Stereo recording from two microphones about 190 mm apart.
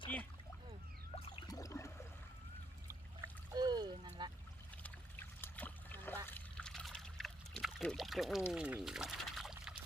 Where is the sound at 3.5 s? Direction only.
20° right (ahead or behind).